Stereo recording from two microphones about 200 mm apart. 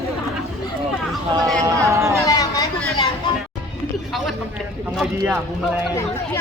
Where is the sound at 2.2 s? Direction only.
15° left (ahead or behind).